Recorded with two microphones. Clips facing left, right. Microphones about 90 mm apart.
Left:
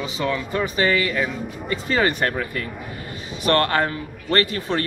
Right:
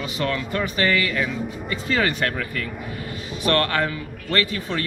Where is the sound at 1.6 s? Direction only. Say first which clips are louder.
Left 2 dB; 35° left (ahead or behind).